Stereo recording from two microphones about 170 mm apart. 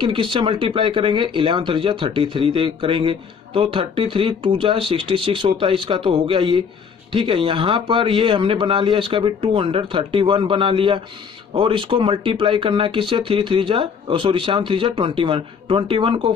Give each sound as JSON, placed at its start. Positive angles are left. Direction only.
{"t": 0.0, "sound": "speech", "side_deg": -30}